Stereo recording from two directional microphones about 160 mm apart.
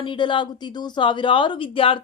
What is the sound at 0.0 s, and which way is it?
Speech, 30° left (ahead or behind).